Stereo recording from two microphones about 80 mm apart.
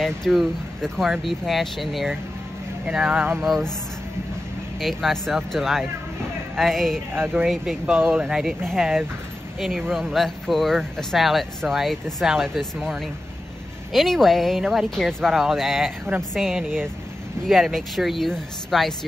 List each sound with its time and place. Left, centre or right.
0.0 s speech: centre
3.1 s speech: right
3.3 s speech: centre
4.7 s speech: centre
7.2 s speech: right
7.4 s speech: centre
8.0 s speech: right
8.3 s speech: centre
16.5 s speech: right
17.5 s speech: centre